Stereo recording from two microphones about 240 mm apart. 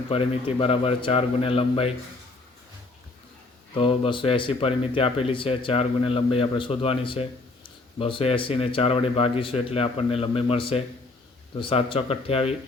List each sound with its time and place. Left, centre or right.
0.1 s speech: left
3.8 s speech: left